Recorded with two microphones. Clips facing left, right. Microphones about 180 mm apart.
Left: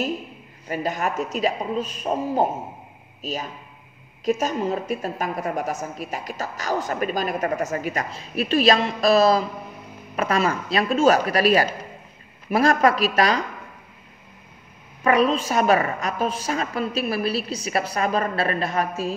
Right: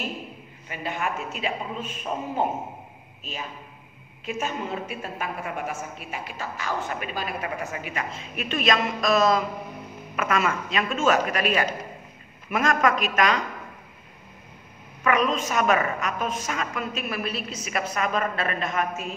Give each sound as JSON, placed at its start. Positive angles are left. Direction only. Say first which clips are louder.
{"t": 0.7, "sound": "a woman's voice", "louder": "left 5 dB", "side_deg": 40}
{"t": 15.0, "sound": "a woman's voice", "louder": "left 4 dB", "side_deg": 35}